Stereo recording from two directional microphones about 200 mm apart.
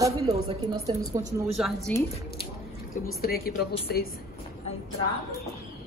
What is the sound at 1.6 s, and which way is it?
Speech, centre (ahead or behind).